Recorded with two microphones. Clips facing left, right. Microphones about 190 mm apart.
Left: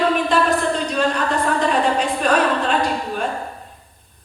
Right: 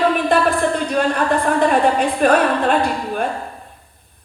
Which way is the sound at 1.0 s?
55° right (ahead or behind).